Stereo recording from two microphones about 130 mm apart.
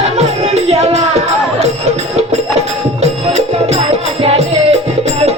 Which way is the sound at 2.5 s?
55° right (ahead or behind).